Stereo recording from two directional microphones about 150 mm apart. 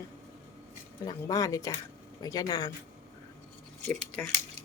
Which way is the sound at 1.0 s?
25° left (ahead or behind).